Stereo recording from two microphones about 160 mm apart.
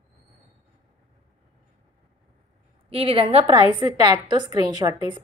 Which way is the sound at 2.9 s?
35° right (ahead or behind).